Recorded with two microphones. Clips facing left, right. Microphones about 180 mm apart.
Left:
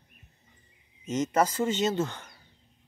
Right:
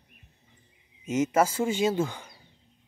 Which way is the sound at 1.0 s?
10° right (ahead or behind).